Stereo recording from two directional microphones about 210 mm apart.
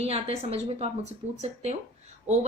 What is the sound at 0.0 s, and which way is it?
A woman's voice, 30° right (ahead or behind).